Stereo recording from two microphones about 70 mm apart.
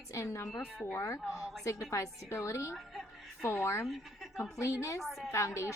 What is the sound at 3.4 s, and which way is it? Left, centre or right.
Speech, left.